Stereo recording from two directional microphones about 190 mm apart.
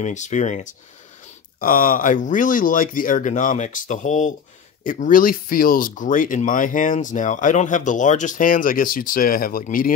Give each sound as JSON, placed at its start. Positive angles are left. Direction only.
{"t": 0.0, "sound": "speech", "side_deg": 40}